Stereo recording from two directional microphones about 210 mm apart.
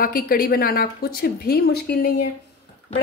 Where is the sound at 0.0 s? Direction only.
45° left (ahead or behind).